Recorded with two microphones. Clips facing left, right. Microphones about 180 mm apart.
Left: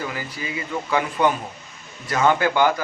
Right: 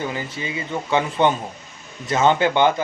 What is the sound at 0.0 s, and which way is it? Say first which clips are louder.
Speech: right 3 dB; 25° right (ahead or behind).